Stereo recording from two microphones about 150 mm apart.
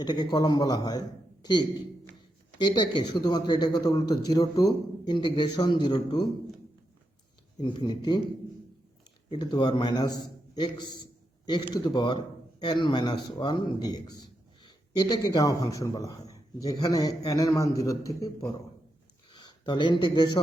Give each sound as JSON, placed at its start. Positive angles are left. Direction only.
{"t": 0.0, "sound": "a man's voice", "side_deg": 30}
{"t": 7.6, "sound": "speech", "side_deg": 30}
{"t": 9.3, "sound": "a man's voice", "side_deg": 30}